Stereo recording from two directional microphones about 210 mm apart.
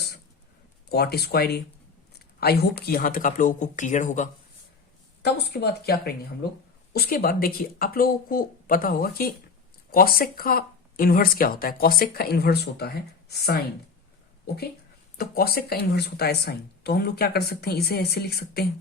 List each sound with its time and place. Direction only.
0.9 s speech: 50° left (ahead or behind)
5.2 s speech: 50° left (ahead or behind)